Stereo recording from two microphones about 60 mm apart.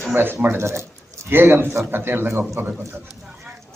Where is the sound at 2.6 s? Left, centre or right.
Right.